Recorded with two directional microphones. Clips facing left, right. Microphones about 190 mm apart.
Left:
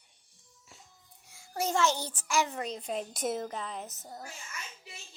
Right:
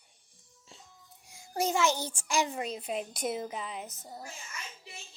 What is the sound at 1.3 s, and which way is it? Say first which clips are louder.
A child's voice: right 1 dB; 15° right (ahead or behind).